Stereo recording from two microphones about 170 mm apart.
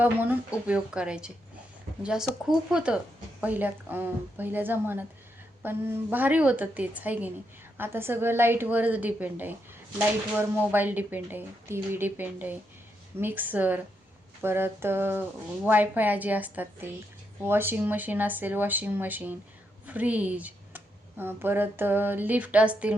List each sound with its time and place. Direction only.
0.0 s speech: 10° right (ahead or behind)